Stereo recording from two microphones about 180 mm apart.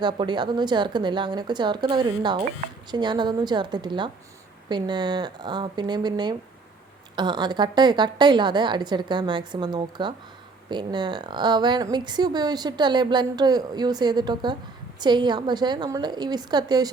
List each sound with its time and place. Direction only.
0.0 s a woman's voice: 25° right (ahead or behind)